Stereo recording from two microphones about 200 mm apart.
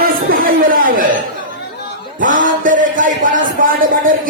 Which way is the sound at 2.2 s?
40° right (ahead or behind).